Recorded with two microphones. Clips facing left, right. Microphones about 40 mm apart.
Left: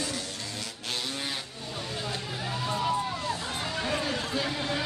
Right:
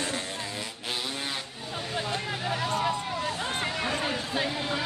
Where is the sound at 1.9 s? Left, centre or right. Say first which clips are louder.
Right 4 dB; right.